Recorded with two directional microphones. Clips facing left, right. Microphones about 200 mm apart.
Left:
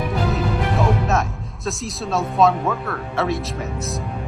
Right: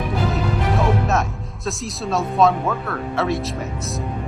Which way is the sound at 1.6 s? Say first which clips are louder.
Even; centre (ahead or behind).